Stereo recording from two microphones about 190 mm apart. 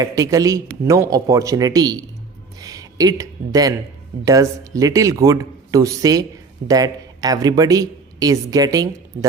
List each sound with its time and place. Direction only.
0.0 s speech: 15° right (ahead or behind)